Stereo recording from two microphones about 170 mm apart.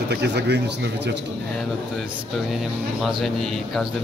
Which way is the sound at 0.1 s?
85° right.